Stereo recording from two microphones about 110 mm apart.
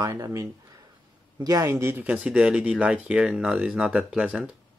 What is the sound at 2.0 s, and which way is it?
Speech, 10° right (ahead or behind).